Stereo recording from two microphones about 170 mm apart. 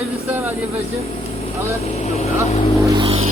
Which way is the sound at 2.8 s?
30° right (ahead or behind).